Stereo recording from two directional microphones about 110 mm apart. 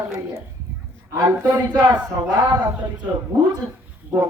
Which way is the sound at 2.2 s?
35° right (ahead or behind).